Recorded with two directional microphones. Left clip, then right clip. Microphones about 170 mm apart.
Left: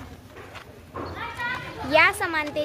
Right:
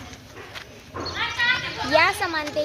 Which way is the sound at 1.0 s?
45° right (ahead or behind).